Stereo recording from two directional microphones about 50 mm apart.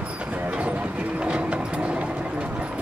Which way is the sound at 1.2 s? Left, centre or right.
Right.